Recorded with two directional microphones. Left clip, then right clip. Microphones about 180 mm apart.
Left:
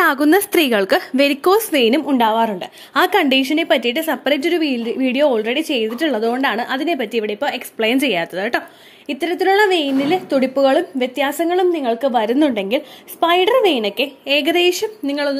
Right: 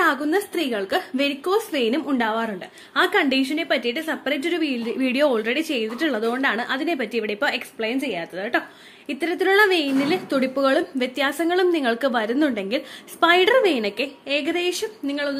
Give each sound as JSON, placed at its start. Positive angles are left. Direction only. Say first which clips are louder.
{"t": 0.0, "sound": "a woman's voice", "louder": "left 6 dB", "side_deg": 50}
{"t": 1.1, "sound": "speech", "louder": "left 8 dB", "side_deg": 40}
{"t": 2.9, "sound": "speech", "louder": "left 5 dB", "side_deg": 35}
{"t": 7.8, "sound": "speech", "louder": "left 11 dB", "side_deg": 40}
{"t": 9.2, "sound": "speech", "louder": "left 3 dB", "side_deg": 15}
{"t": 12.3, "sound": "speech", "louder": "left 6 dB", "side_deg": 20}
{"t": 13.9, "sound": "speech", "louder": "left 7 dB", "side_deg": 25}